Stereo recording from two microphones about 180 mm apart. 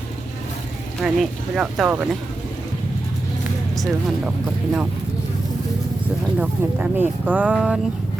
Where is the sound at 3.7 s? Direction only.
Centre (ahead or behind).